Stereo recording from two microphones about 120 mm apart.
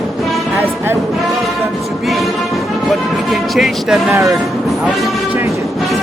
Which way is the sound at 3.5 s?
5° right (ahead or behind).